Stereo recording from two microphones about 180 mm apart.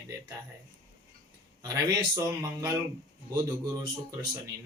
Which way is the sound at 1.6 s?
15° right (ahead or behind).